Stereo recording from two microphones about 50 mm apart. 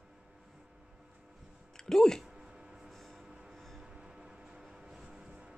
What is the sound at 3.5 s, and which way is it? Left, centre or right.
Music, centre.